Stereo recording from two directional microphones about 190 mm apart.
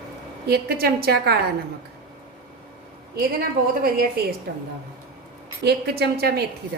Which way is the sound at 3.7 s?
55° right (ahead or behind).